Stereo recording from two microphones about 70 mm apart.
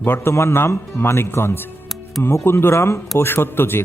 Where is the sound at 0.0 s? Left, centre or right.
Left.